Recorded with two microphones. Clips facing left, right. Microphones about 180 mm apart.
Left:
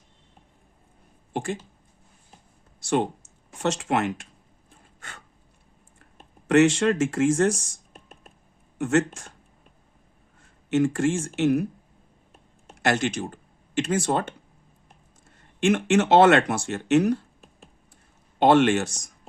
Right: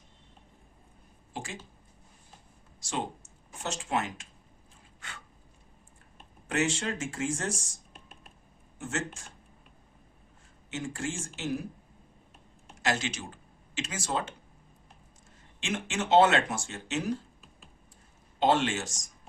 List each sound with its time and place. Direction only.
1.3 s speech: 55° left (ahead or behind)
2.8 s speech: 65° left (ahead or behind)
4.9 s a sound: 45° left (ahead or behind)
6.5 s speech: 75° left (ahead or behind)
7.9 s computer keyboard: 45° left (ahead or behind)
8.8 s speech: 75° left (ahead or behind)
10.7 s speech: 70° left (ahead or behind)
12.8 s speech: 60° left (ahead or behind)
15.6 s speech: 70° left (ahead or behind)
18.3 s speech: 65° left (ahead or behind)